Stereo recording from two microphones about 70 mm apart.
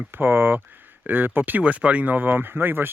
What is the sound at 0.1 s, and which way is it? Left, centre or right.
A man's voice, right.